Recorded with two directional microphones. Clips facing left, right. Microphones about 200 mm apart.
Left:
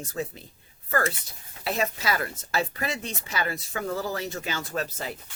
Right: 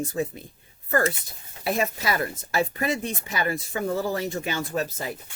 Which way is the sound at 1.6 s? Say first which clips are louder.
Right 2 dB; 15° right (ahead or behind).